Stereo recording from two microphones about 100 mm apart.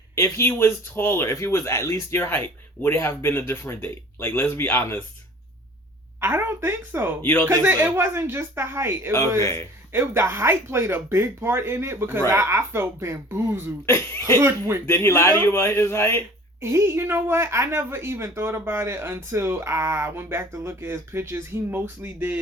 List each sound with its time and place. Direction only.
0.2 s speech: 25° left (ahead or behind)
6.1 s a woman's voice: 20° right (ahead or behind)
7.2 s speech: 20° left (ahead or behind)
7.4 s a woman's voice: 20° right (ahead or behind)
9.4 s speech: 30° left (ahead or behind)
9.9 s a woman's voice: 25° right (ahead or behind)
13.8 s speech: 25° left (ahead or behind)
16.6 s a woman's voice: 25° right (ahead or behind)